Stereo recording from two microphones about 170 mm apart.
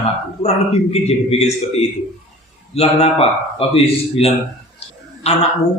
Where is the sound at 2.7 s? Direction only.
35° left (ahead or behind).